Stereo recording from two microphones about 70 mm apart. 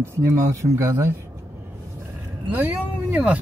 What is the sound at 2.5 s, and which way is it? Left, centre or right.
Speech, right.